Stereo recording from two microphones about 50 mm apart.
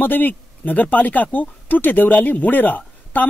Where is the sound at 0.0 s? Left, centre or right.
Left.